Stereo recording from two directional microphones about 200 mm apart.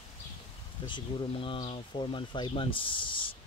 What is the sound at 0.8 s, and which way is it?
Speech, 25° left (ahead or behind).